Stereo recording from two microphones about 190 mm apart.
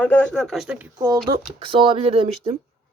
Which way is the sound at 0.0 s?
10° left (ahead or behind).